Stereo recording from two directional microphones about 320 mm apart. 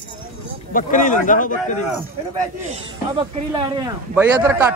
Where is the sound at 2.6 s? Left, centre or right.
Centre.